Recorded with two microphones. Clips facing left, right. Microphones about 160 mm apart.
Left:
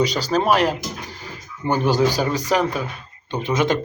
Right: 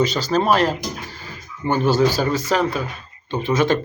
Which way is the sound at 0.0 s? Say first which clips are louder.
Right 1 dB; 10° left (ahead or behind).